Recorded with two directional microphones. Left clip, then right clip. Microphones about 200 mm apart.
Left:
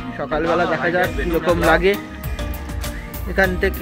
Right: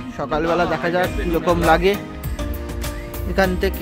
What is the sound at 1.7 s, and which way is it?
Music, 15° right (ahead or behind).